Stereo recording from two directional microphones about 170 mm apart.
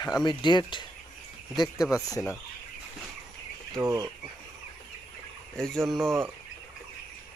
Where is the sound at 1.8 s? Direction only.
5° right (ahead or behind).